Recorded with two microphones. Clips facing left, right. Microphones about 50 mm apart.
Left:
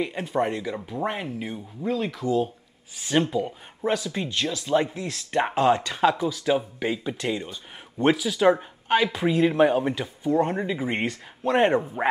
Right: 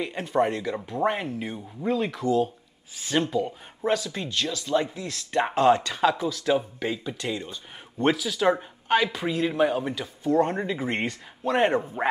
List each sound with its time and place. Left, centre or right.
0.0 s speech: centre
2.2 s speech: centre; by 7.4 s left
8.0 s speech: centre